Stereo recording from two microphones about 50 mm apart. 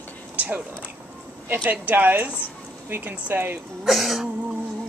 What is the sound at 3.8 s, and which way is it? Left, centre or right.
Throat clearing, centre.